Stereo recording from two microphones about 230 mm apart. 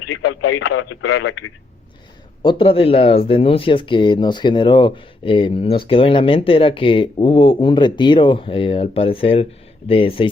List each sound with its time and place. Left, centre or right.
0.6 s speech: left
2.4 s speech: left